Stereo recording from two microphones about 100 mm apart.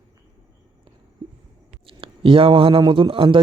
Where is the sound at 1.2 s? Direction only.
55° right (ahead or behind).